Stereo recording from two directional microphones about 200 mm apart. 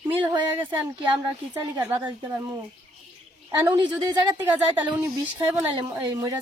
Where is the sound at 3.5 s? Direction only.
20° right (ahead or behind).